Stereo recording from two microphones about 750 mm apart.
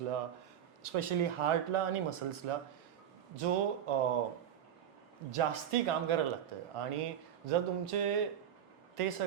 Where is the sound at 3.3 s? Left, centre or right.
Right.